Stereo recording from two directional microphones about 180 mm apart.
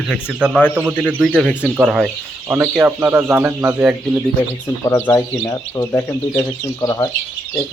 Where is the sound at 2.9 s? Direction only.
10° right (ahead or behind).